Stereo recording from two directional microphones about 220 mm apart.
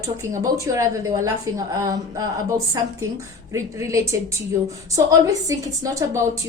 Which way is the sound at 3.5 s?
15° right (ahead or behind).